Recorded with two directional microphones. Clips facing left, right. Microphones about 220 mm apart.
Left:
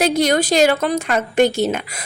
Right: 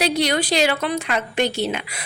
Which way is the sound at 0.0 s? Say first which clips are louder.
Left 4 dB; 45° left (ahead or behind).